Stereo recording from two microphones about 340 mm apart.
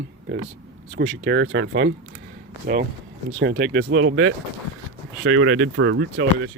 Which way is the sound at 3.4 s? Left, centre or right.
Right.